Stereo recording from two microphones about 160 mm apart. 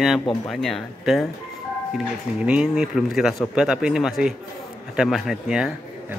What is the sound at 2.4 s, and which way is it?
Speech, 5° right (ahead or behind).